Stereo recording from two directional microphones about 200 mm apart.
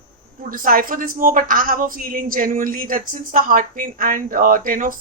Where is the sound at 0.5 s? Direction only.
45° right (ahead or behind).